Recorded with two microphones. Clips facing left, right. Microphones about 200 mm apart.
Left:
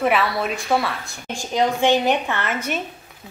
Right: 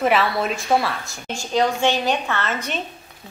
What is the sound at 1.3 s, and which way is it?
A woman's voice, 15° left (ahead or behind).